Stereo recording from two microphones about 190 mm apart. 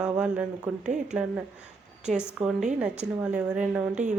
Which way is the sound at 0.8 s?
40° right (ahead or behind).